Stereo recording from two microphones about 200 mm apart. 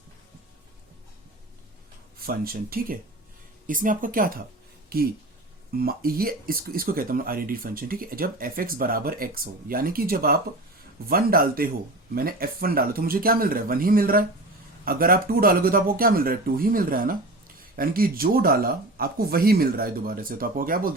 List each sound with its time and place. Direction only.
2.1 s speech: 50° right (ahead or behind)